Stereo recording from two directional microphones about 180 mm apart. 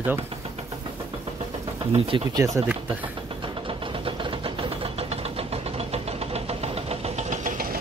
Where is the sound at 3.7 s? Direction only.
30° right (ahead or behind).